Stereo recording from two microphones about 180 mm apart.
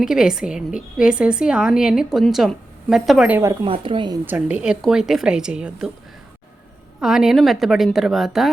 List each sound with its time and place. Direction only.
0.0 s a woman's voice: 5° right (ahead or behind)
3.6 s speech: 30° right (ahead or behind)
4.3 s a woman's voice: 10° right (ahead or behind)
7.0 s a woman's voice: 5° right (ahead or behind)